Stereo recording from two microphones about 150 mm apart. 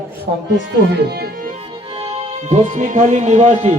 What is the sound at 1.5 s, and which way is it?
Music, 40° right (ahead or behind).